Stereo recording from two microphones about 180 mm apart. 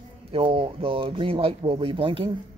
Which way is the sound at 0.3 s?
30° right (ahead or behind).